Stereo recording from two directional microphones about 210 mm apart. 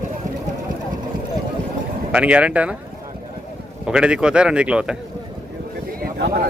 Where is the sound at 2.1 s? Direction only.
5° right (ahead or behind).